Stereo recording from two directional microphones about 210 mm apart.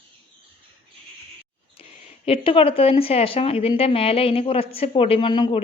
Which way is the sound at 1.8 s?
25° left (ahead or behind).